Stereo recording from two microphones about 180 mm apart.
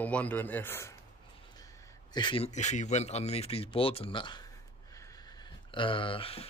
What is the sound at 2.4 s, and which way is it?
Speech, 40° left (ahead or behind).